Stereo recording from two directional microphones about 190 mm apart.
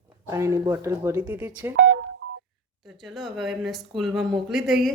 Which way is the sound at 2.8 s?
Centre (ahead or behind).